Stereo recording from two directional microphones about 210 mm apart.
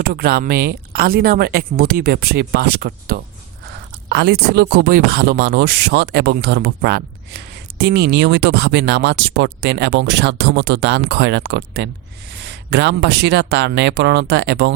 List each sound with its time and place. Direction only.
0.0 s speech: 45° right (ahead or behind)